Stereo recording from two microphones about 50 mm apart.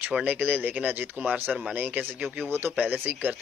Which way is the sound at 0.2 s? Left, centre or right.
Right.